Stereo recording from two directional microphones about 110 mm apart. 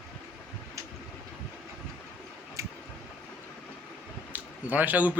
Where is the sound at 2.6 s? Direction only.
30° right (ahead or behind).